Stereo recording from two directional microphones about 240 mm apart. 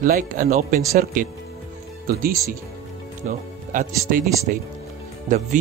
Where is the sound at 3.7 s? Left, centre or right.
Right.